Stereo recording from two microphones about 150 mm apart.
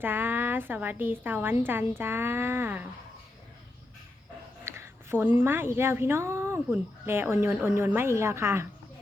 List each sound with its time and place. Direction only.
0.0 s speech: 15° right (ahead or behind)
4.6 s a sound: 15° right (ahead or behind)
5.4 s speech: 15° right (ahead or behind)